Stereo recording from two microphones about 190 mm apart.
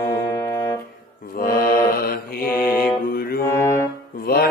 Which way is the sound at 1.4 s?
50° left (ahead or behind).